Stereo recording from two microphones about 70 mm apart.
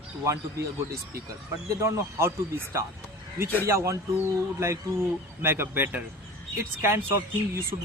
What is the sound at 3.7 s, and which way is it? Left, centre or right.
Speech, right.